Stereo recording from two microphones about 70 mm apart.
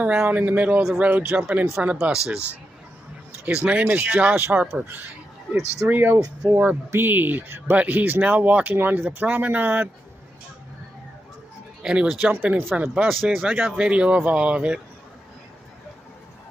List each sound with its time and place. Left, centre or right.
0.0 s speech: centre
3.4 s speech: centre
6.4 s speech: centre
6.9 s speech: right
11.8 s speech: centre
13.1 s speech: centre
13.7 s speech: centre